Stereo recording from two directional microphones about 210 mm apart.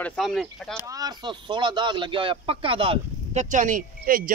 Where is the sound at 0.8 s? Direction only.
15° right (ahead or behind).